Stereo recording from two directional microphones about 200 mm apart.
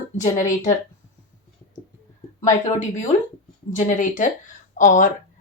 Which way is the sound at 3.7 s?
40° left (ahead or behind).